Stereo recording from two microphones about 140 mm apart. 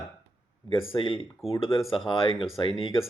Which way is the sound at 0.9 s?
40° left (ahead or behind).